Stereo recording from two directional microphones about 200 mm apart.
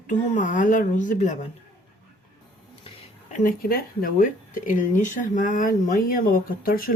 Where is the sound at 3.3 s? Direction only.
45° left (ahead or behind).